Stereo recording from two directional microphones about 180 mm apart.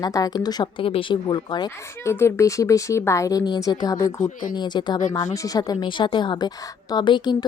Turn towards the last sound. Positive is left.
turn(degrees=25)  # may be behind; listen again after turning